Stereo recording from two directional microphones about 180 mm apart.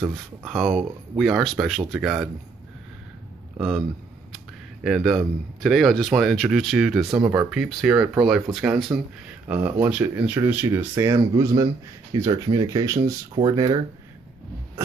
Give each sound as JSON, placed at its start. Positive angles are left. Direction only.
{"t": 0.0, "sound": "speech", "side_deg": 0}
{"t": 3.5, "sound": "a man's voice", "side_deg": 0}
{"t": 4.8, "sound": "speech", "side_deg": 0}
{"t": 7.1, "sound": "speech", "side_deg": -15}
{"t": 7.5, "sound": "speech", "side_deg": -5}